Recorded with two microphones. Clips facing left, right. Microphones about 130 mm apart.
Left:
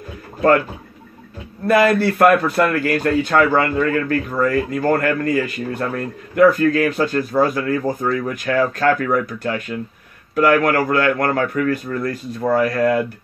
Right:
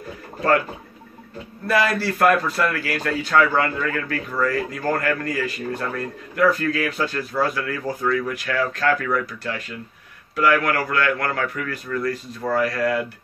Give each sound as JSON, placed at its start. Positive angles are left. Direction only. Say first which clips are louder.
{"t": 1.7, "sound": "speech", "louder": "left 6 dB", "side_deg": 50}